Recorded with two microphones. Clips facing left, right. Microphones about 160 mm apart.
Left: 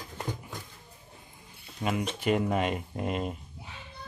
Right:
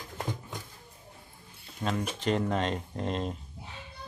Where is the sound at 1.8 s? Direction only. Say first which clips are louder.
Left 1 dB; 15° left (ahead or behind).